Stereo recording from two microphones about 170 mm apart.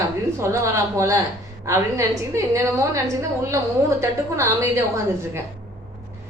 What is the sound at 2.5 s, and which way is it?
A woman's voice, 15° right (ahead or behind).